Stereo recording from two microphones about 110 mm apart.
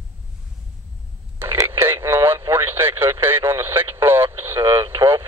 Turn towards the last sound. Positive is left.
turn(degrees=-20)  # may be behind; listen again after turning